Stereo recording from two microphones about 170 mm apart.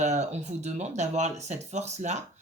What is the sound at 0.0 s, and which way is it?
Speech, 40° right (ahead or behind).